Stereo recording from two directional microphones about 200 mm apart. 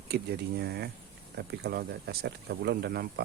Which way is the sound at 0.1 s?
55° right (ahead or behind).